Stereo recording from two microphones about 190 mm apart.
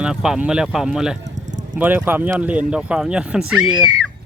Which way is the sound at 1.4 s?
40° right (ahead or behind).